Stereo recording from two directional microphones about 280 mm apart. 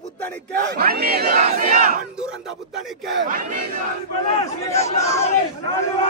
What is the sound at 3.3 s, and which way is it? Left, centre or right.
Speech, right.